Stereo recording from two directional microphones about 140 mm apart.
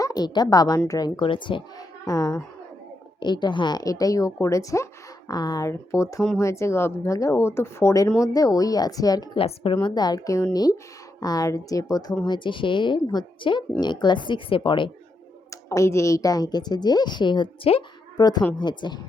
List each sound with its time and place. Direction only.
0.0 s a woman's voice: 25° left (ahead or behind)
15.4 s a woman's voice: 20° left (ahead or behind); by 17.8 s 40° left (ahead or behind)
18.2 s a woman's voice: 30° left (ahead or behind)